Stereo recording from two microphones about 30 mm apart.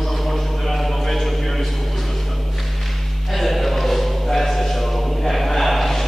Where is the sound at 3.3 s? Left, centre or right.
Centre.